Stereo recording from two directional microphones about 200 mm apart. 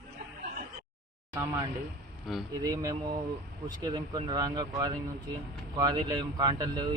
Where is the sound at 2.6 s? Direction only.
15° right (ahead or behind).